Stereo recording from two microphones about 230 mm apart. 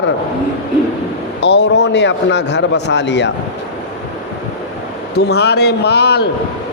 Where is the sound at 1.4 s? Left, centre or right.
Left.